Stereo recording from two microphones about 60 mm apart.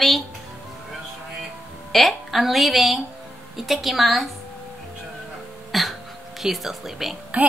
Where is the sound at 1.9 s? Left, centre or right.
Centre.